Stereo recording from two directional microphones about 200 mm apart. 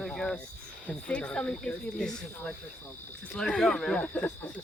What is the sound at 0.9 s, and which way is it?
Speech, 5° left (ahead or behind).